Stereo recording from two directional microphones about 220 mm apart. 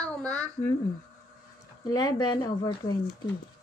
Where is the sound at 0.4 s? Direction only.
10° left (ahead or behind).